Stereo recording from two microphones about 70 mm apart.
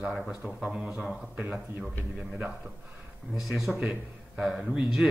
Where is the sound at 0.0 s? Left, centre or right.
Centre.